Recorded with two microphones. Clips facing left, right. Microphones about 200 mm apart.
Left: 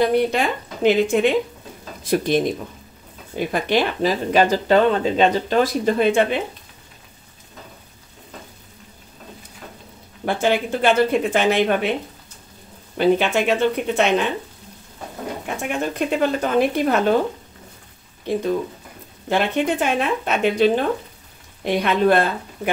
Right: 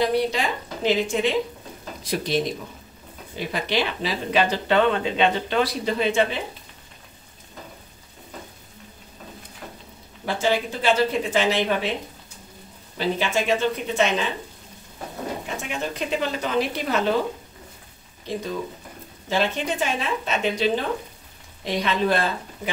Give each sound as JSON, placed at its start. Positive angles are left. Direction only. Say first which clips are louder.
{"t": 0.0, "sound": "speech", "louder": "left 4 dB", "side_deg": 55}
{"t": 10.2, "sound": "speech", "louder": "left 3 dB", "side_deg": 55}
{"t": 12.9, "sound": "speech", "louder": "left 7 dB", "side_deg": 60}
{"t": 15.4, "sound": "speech", "louder": "left 5 dB", "side_deg": 55}
{"t": 19.2, "sound": "speech", "louder": "left 4 dB", "side_deg": 55}